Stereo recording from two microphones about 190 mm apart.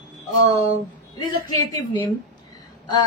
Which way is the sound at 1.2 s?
20° left (ahead or behind).